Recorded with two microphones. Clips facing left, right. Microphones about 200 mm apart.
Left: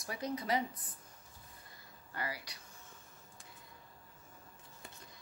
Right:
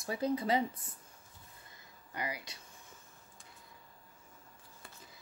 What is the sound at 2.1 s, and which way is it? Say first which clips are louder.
Speech: right 2 dB; 20° right (ahead or behind).